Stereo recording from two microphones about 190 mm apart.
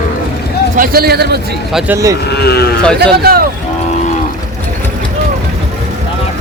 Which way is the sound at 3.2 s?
55° right (ahead or behind).